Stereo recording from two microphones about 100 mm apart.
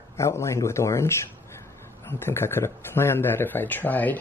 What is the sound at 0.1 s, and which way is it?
Speech, 30° left (ahead or behind).